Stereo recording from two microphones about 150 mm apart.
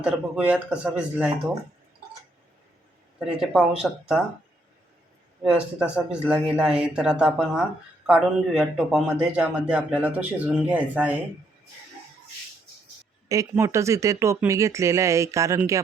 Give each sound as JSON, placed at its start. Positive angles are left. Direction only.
{"t": 0.0, "sound": "speech", "side_deg": -10}
{"t": 3.2, "sound": "speech", "side_deg": -5}
{"t": 5.5, "sound": "speech", "side_deg": -10}
{"t": 13.2, "sound": "speech", "side_deg": -20}